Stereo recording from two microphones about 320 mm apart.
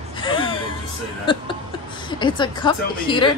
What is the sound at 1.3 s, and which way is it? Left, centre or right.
A woman's voice, centre.